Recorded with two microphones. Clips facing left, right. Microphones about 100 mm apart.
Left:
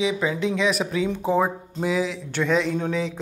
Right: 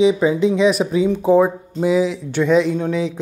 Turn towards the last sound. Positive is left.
turn(degrees=-5)  # may be behind; listen again after turning